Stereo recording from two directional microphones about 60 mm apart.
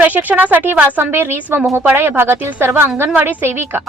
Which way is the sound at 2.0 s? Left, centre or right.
Right.